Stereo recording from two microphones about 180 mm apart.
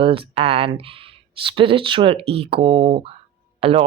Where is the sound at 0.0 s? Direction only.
30° right (ahead or behind).